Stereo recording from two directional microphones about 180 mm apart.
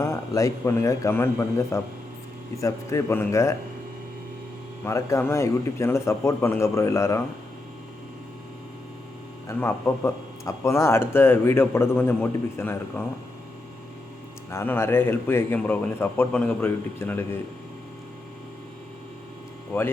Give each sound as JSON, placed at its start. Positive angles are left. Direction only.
{"t": 0.0, "sound": "speech", "side_deg": 20}
{"t": 4.9, "sound": "speech", "side_deg": 15}
{"t": 9.5, "sound": "speech", "side_deg": 15}
{"t": 14.5, "sound": "speech", "side_deg": 15}